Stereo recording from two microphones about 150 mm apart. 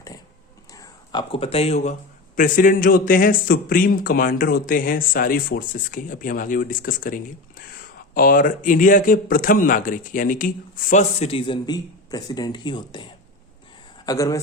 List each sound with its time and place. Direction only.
0.7 s a sound: 20° left (ahead or behind)
1.3 s a man's voice: 40° left (ahead or behind); by 11.0 s 65° left (ahead or behind)
11.2 s speech: 40° left (ahead or behind); by 14.4 s 20° left (ahead or behind)